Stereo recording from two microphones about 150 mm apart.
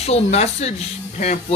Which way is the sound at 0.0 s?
45° left (ahead or behind).